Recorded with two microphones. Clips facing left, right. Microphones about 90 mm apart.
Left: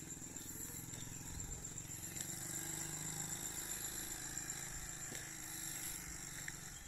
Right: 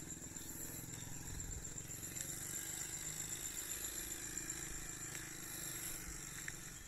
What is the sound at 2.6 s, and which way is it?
Vehicle, 25° left (ahead or behind).